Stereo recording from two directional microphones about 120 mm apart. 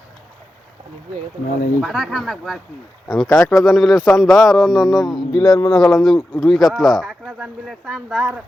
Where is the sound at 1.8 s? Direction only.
Centre (ahead or behind).